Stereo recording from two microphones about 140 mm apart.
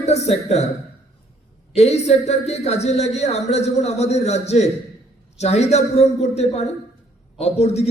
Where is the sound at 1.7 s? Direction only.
50° left (ahead or behind).